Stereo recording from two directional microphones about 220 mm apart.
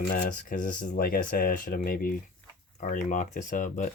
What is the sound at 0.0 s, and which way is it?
Speech, 40° left (ahead or behind).